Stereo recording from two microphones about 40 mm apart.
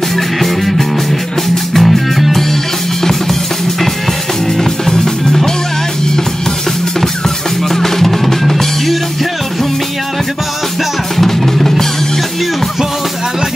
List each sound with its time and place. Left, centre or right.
0.1 s music: centre
4.6 s music: centre
7.6 s music: centre
11.1 s music: centre